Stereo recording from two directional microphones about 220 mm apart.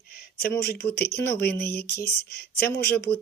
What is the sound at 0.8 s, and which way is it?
Speech, 45° left (ahead or behind).